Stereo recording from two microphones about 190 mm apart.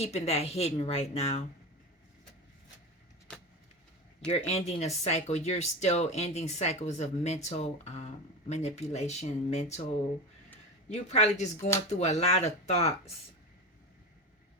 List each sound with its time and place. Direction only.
0.0 s speech: 35° left (ahead or behind)
3.3 s vehicle: 5° left (ahead or behind)
4.3 s speech: 35° left (ahead or behind)
10.8 s speech: 35° left (ahead or behind)